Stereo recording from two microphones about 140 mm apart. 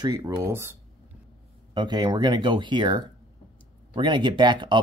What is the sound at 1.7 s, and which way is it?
Speech, 30° right (ahead or behind).